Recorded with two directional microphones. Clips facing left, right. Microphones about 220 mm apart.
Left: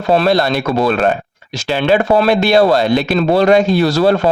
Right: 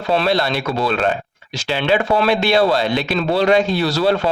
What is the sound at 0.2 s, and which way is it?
Speech, 45° left (ahead or behind).